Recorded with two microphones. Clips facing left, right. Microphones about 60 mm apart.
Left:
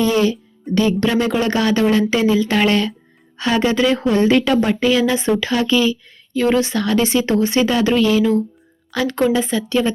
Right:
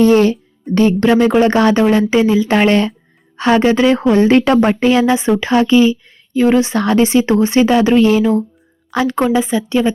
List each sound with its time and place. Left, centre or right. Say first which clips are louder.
0.0 s speech: right 6 dB; right
5.1 s speech: right 5 dB; right